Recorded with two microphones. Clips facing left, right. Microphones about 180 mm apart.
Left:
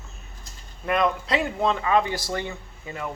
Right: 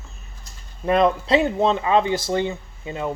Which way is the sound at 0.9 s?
30° right (ahead or behind).